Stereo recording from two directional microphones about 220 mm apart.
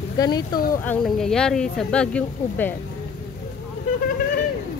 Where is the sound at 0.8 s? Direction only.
Centre (ahead or behind).